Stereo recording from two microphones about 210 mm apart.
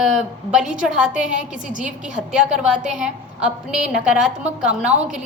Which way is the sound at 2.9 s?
5° right (ahead or behind).